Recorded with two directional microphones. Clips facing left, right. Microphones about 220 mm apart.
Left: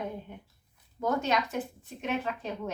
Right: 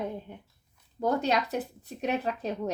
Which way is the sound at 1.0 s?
35° right (ahead or behind).